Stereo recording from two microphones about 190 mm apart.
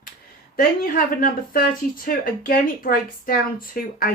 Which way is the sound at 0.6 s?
45° left (ahead or behind).